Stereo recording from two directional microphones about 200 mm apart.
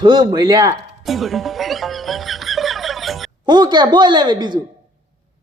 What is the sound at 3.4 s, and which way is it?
Speech, 20° right (ahead or behind).